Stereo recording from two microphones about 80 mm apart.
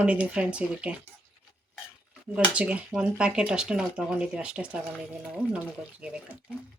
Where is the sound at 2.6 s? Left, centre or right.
Centre.